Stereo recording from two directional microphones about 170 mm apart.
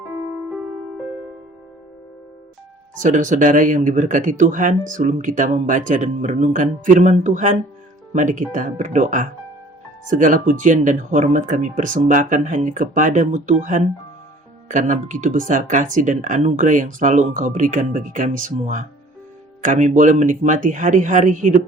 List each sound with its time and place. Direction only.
2.9 s speech: 45° right (ahead or behind)